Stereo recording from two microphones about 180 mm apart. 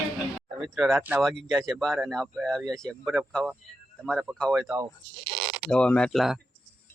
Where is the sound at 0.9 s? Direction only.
5° right (ahead or behind).